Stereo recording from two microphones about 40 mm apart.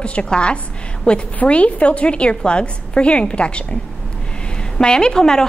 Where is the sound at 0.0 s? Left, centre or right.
Left.